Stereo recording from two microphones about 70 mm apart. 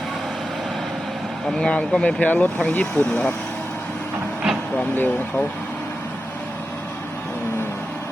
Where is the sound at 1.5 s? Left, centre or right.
Centre.